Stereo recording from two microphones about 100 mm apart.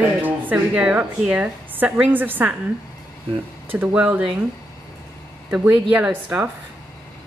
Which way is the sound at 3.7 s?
15° right (ahead or behind).